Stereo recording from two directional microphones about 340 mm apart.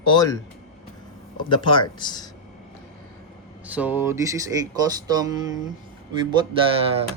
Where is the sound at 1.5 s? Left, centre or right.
Centre.